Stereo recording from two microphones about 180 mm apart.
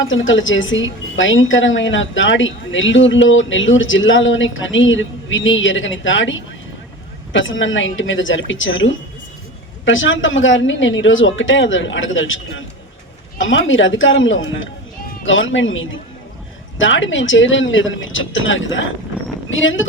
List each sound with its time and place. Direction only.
0.0 s speech: 90° left